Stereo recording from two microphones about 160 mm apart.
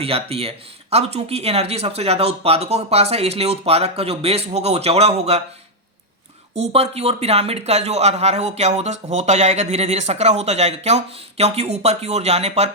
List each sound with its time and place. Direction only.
0.0 s speech: 35° right (ahead or behind)
6.5 s speech: 40° right (ahead or behind)